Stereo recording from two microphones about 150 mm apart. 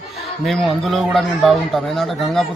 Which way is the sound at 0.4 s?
Centre (ahead or behind).